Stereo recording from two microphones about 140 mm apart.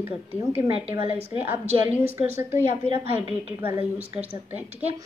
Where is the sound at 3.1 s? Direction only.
15° right (ahead or behind).